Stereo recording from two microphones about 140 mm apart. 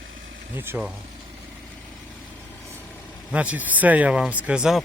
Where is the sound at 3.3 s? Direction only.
10° right (ahead or behind).